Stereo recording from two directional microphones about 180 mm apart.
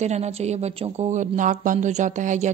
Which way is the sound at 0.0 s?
40° right (ahead or behind).